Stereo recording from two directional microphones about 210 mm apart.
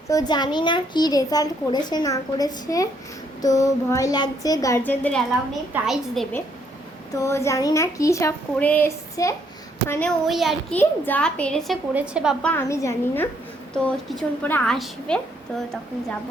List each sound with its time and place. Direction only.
0.1 s a child's voice: 20° left (ahead or behind); by 6.2 s centre (ahead or behind)
7.2 s a woman's voice: 15° left (ahead or behind)
10.2 s a woman's voice: centre (ahead or behind)